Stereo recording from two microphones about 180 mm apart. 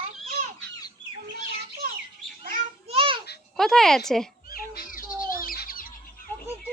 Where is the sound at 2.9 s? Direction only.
30° right (ahead or behind).